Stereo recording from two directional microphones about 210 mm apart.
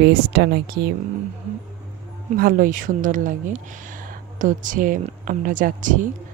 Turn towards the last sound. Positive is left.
turn(degrees=-40)  # may be behind; listen again after turning